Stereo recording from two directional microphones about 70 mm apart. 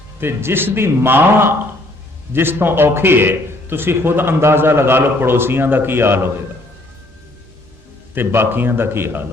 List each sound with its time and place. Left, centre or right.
0.2 s a man's voice: right
8.1 s a man's voice: right